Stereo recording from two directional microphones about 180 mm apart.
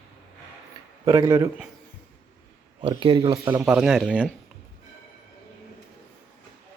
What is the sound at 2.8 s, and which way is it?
Speech, 25° right (ahead or behind).